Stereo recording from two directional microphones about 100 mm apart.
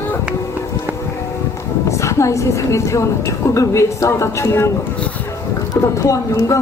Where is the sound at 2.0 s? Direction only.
30° left (ahead or behind).